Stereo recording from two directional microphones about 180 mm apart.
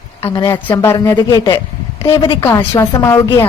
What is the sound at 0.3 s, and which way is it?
Speech, 15° left (ahead or behind).